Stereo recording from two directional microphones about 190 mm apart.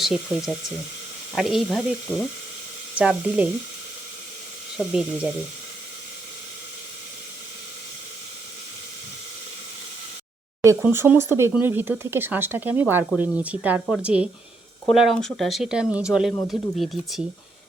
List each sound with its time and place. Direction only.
0.0 s speech: centre (ahead or behind)
4.8 s speech: 5° right (ahead or behind)
10.6 s speech: 15° right (ahead or behind)